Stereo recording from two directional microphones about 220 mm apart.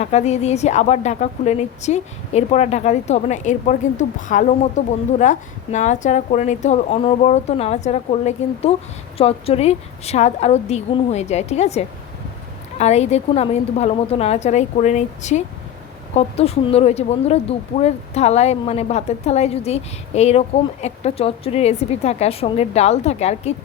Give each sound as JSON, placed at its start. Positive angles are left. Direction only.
{"t": 0.0, "sound": "speech", "side_deg": 30}